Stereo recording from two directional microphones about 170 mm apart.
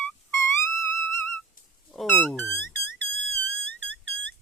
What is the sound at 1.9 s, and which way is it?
Speech, 10° left (ahead or behind).